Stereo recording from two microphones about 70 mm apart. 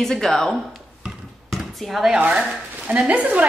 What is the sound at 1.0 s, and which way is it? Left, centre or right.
Bouncing, centre.